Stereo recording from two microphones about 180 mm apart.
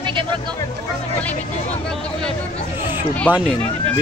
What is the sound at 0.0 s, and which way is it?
Music, 30° right (ahead or behind).